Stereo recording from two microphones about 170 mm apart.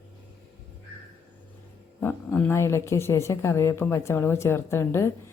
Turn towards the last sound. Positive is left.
turn(degrees=15)  # may be behind; listen again after turning